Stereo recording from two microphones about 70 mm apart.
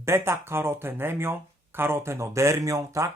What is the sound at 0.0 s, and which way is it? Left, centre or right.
Speech, right.